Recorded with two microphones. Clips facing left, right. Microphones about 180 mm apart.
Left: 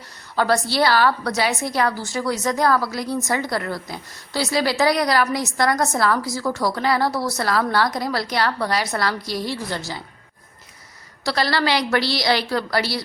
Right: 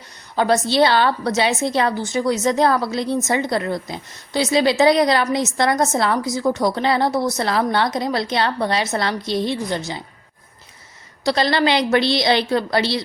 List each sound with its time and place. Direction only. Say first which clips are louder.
0.3 s a woman's voice: right 3 dB; 20° right (ahead or behind)
11.3 s a woman's voice: right 3 dB; 20° right (ahead or behind)